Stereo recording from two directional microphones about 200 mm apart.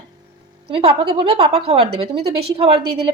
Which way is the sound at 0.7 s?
30° right (ahead or behind).